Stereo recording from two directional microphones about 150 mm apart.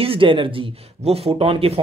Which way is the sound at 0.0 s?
35° right (ahead or behind).